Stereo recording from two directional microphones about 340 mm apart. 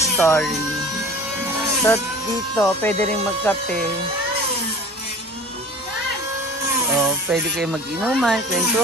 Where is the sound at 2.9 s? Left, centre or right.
Centre.